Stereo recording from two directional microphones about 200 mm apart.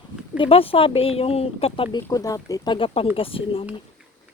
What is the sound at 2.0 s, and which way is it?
Speech, 15° left (ahead or behind).